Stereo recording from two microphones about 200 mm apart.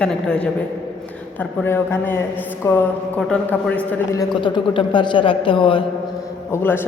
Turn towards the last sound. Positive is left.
turn(degrees=10)  # may be behind; listen again after turning